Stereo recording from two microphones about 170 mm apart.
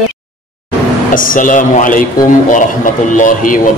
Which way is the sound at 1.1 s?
55° left (ahead or behind).